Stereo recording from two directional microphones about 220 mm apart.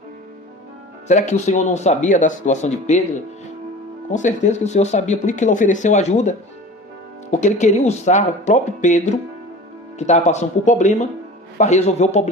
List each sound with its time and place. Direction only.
1.0 s speech: 30° left (ahead or behind)
4.1 s speech: 35° left (ahead or behind)